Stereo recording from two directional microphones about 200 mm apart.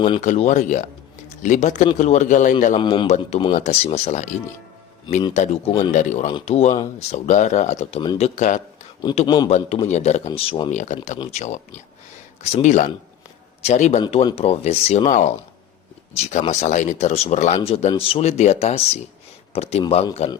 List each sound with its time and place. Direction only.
0.2 s speech: 35° left (ahead or behind)
2.8 s speech: 25° left (ahead or behind)
8.4 s speech: 35° left (ahead or behind)
9.0 s a man's voice: 20° left (ahead or behind)
9.6 s speech: 30° left (ahead or behind)